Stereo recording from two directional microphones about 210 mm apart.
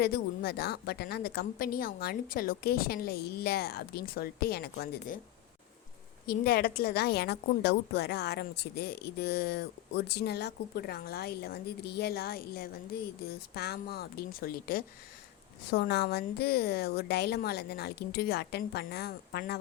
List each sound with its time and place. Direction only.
0.0 s a woman's voice: 50° left (ahead or behind)
6.2 s a woman's voice: 45° left (ahead or behind)